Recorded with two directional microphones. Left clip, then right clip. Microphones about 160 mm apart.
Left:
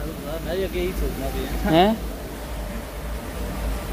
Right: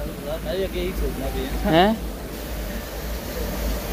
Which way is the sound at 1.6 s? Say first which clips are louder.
Even; 90° left.